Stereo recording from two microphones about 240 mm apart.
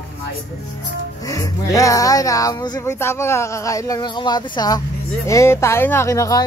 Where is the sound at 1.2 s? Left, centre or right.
Centre.